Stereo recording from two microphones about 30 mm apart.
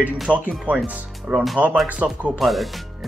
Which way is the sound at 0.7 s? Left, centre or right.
Right.